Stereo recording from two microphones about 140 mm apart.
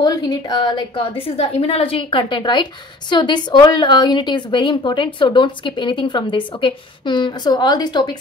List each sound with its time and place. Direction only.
0.0 s a woman's voice: 30° left (ahead or behind)